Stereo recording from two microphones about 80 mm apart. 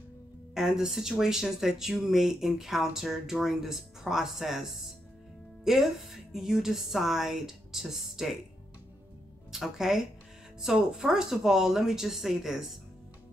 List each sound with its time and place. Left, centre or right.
0.6 s speech: centre
9.5 s speech: centre